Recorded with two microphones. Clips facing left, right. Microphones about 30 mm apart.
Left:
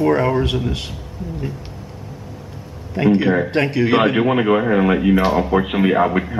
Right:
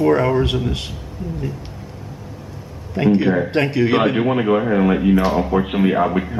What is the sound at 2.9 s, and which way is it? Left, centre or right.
Speech, centre.